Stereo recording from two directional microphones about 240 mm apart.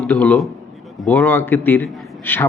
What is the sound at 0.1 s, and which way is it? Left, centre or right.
A man's voice, centre.